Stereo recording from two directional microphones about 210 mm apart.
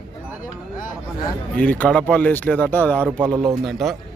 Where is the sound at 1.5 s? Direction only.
5° left (ahead or behind).